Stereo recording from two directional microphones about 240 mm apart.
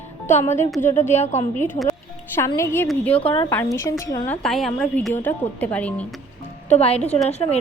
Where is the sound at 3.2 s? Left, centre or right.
Left.